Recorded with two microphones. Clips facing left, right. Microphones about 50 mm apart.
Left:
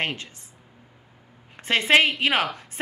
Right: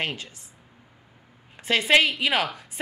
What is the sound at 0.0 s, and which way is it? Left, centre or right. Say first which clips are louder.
Speech: left 2 dB; left.